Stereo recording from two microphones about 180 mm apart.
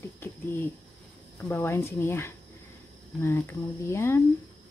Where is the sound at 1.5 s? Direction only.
10° left (ahead or behind).